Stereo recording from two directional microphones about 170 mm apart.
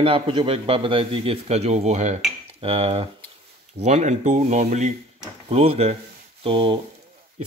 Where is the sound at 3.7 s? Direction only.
45° right (ahead or behind).